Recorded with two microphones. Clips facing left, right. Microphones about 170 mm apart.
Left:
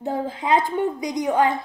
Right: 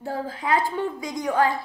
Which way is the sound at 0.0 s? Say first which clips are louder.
Left 3 dB; 20° left (ahead or behind).